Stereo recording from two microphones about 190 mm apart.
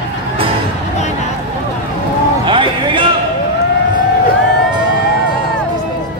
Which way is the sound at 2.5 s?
25° right (ahead or behind).